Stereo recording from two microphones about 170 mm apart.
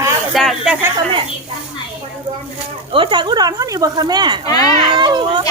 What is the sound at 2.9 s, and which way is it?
Speech, 30° right (ahead or behind).